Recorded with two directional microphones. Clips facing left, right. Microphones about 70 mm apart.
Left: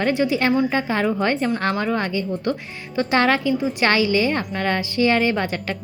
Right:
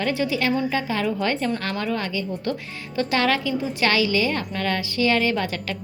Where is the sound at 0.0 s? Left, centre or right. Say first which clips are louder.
Left 4 dB; left.